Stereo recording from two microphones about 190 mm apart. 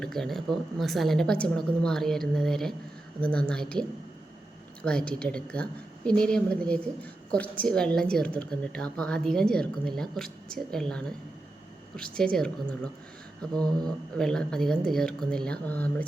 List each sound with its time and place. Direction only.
0.0 s a woman's voice: centre (ahead or behind)
12.1 s a woman's voice: 5° left (ahead or behind)
13.6 s speech: 20° right (ahead or behind)
14.2 s a woman's voice: 5° left (ahead or behind)